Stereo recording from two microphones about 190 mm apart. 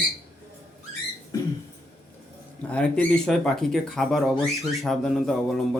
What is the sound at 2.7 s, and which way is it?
Speech, 5° left (ahead or behind).